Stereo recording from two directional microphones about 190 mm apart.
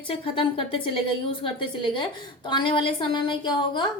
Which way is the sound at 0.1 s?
30° left (ahead or behind).